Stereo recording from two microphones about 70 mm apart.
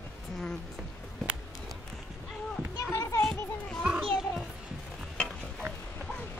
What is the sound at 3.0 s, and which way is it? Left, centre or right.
Music, left.